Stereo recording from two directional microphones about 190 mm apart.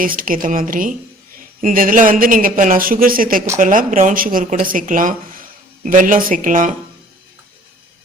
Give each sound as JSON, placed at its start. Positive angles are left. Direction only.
{"t": 0.0, "sound": "speech", "side_deg": -45}